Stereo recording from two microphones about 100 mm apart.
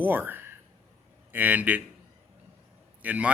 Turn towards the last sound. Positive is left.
turn(degrees=-15)  # may be behind; listen again after turning